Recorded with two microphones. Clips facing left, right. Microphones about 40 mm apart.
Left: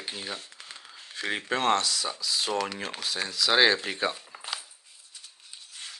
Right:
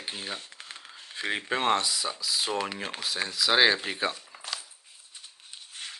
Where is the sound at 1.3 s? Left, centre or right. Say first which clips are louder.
Left 1 dB; centre.